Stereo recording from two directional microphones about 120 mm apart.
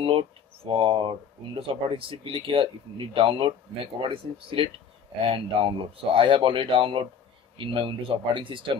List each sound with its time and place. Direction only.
0.0 s speech: 50° right (ahead or behind)